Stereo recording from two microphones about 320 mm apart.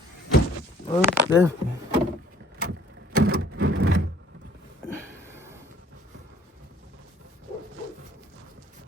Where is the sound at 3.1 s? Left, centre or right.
Right.